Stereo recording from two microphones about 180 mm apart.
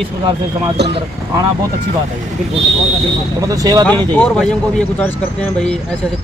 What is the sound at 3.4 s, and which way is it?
Speech, 20° right (ahead or behind).